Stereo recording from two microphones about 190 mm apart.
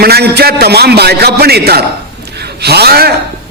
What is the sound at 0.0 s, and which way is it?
A man's voice, 55° right (ahead or behind).